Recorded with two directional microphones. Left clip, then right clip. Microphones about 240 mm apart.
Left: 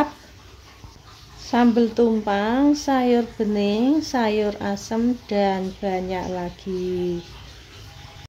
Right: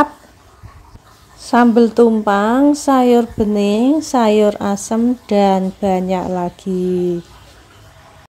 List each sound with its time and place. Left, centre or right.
1.4 s speech: right